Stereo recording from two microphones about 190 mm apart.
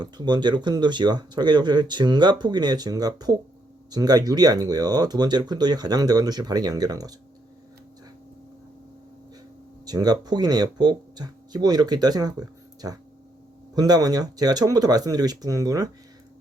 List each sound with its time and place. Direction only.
0.0 s speech: 20° right (ahead or behind)
9.8 s speech: 20° right (ahead or behind)